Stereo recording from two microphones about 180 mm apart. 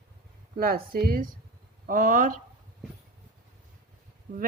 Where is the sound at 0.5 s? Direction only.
55° right (ahead or behind).